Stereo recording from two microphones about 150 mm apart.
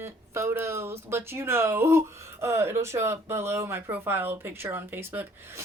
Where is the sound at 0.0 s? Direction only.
15° right (ahead or behind).